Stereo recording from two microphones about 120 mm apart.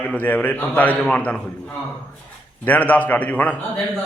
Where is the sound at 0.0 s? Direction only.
15° left (ahead or behind).